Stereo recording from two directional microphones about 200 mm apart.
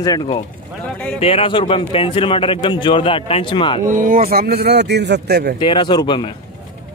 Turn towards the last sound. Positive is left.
turn(degrees=20)  # may be behind; listen again after turning